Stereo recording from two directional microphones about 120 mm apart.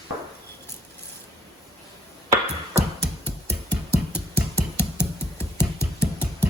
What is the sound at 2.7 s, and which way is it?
Music, 60° right (ahead or behind).